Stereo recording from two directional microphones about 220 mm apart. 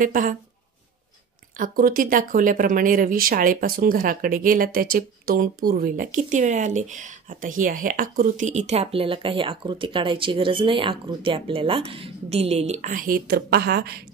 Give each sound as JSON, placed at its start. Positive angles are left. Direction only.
{"t": 0.0, "sound": "speech", "side_deg": -35}
{"t": 1.6, "sound": "speech", "side_deg": -40}